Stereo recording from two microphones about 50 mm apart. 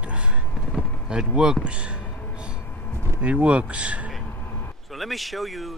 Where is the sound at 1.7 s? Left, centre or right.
Right.